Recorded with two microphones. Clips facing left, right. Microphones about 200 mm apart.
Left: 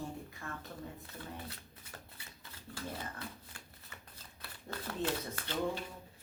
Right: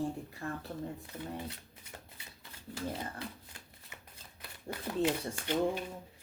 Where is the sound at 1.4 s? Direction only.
25° right (ahead or behind).